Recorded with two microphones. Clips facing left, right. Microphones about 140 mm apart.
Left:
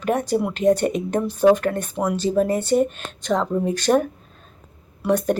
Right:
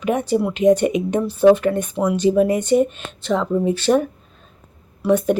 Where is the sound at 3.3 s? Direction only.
5° right (ahead or behind).